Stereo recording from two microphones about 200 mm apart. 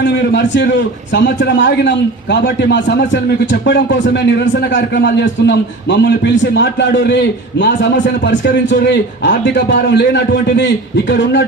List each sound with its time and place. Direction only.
0.0 s a man's voice: 60° left (ahead or behind)